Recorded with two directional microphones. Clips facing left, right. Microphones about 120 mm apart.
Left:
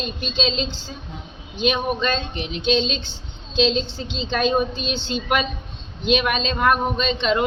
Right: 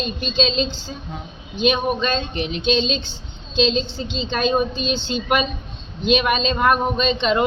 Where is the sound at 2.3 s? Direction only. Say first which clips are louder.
Right 4 dB; 60° right (ahead or behind).